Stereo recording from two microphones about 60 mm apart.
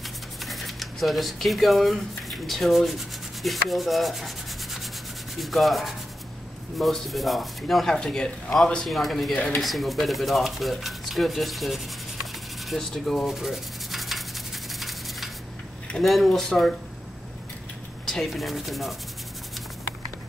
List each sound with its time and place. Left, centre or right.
0.4 s a sound: centre
2.4 s rub: centre
5.4 s speech: centre
8.8 s speech: centre
9.3 s dishes: left
9.6 s speech: centre
13.2 s sanding: centre
14.7 s rub: centre
16.0 s speech: centre
18.0 s speech: centre